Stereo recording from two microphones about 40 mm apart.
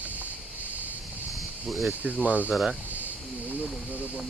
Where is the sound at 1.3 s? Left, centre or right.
Centre.